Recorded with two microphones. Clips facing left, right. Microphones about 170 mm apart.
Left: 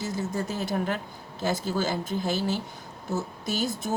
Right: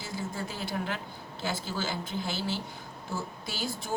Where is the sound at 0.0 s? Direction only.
45° left (ahead or behind).